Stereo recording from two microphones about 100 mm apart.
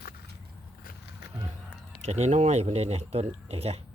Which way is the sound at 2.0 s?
90° right.